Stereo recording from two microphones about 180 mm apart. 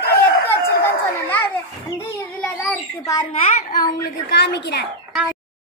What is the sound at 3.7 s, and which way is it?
A woman's voice, 65° left (ahead or behind).